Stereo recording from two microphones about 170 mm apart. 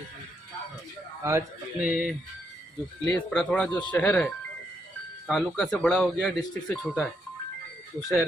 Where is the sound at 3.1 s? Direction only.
5° left (ahead or behind).